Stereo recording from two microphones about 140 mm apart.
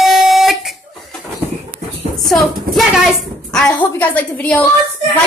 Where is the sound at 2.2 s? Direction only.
Centre (ahead or behind).